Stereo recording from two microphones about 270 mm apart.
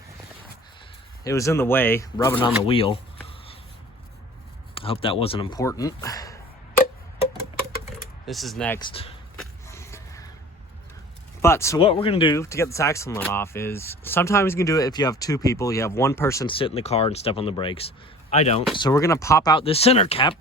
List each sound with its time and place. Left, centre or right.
1.2 s speech: centre
2.6 s a sound: centre
4.7 s speech: centre
8.3 s speech: centre
8.8 s speech: centre
9.4 s a sound: centre
11.4 s speech: centre